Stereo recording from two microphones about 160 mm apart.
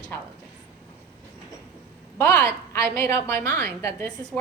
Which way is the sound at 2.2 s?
20° left (ahead or behind).